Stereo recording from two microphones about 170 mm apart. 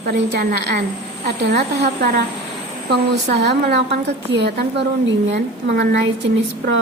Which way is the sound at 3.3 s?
75° right (ahead or behind).